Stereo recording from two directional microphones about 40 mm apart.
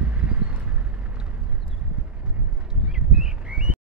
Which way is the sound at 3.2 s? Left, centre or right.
Right.